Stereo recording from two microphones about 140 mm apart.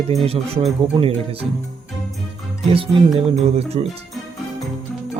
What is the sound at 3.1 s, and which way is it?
Speech, 45° right (ahead or behind).